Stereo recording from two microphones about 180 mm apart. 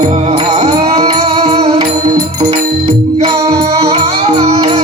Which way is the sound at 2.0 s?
20° right (ahead or behind).